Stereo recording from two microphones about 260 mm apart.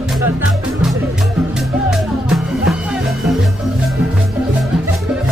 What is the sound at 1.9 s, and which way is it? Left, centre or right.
Music, centre.